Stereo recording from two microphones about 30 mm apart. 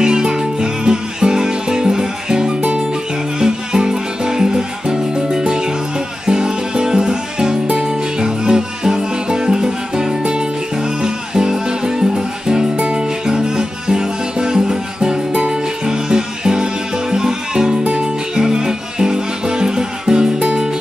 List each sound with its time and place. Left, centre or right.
0.0 s music: right
4.8 s music: right
7.6 s music: right
12.7 s music: right
13.0 s music: right
15.3 s music: right
15.6 s music: right
17.8 s music: right
18.3 s music: right
20.3 s music: right